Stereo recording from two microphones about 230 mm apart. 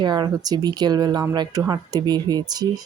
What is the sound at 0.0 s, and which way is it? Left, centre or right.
Speech, centre.